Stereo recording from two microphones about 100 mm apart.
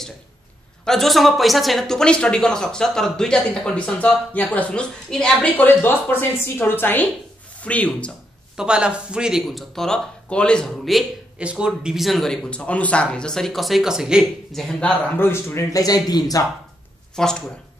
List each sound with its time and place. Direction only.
0.8 s speech: 5° left (ahead or behind)
8.5 s speech: 10° right (ahead or behind); by 16.4 s 40° left (ahead or behind)
17.1 s speech: 5° left (ahead or behind)